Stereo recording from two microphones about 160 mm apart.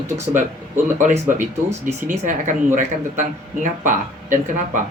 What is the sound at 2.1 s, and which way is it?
Speech, 50° right (ahead or behind).